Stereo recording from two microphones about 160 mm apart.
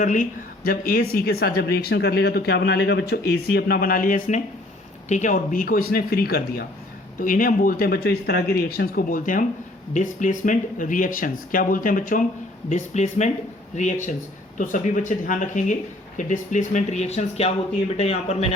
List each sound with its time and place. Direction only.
0.0 s speech: 55° left (ahead or behind); by 6.7 s 75° left (ahead or behind)
7.2 s speech: 55° left (ahead or behind)
12.6 s speech: 45° left (ahead or behind)